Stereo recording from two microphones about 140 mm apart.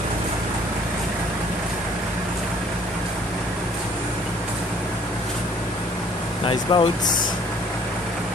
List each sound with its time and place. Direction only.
6.4 s speech: 40° left (ahead or behind)